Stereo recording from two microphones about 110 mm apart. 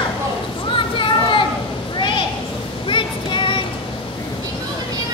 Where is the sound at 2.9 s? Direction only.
45° left (ahead or behind).